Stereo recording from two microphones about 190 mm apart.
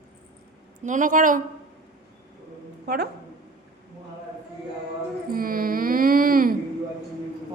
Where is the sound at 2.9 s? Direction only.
60° right (ahead or behind).